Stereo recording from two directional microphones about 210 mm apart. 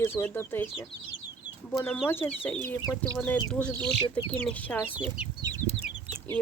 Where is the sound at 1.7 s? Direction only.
5° left (ahead or behind).